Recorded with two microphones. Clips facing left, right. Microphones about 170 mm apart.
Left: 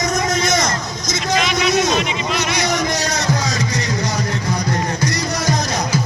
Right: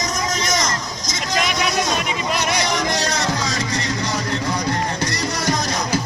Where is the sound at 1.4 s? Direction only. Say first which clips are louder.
Left 3 dB; 45° right (ahead or behind).